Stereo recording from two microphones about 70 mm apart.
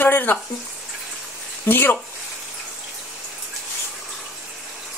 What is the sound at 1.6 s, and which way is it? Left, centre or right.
Speech, left.